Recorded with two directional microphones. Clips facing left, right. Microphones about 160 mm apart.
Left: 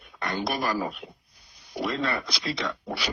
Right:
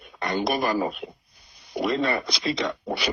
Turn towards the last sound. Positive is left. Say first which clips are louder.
# right 4 dB
turn(degrees=-20)  # may be behind; listen again after turning